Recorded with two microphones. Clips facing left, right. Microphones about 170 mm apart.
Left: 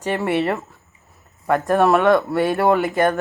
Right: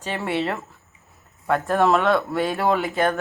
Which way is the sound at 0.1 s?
15° left (ahead or behind).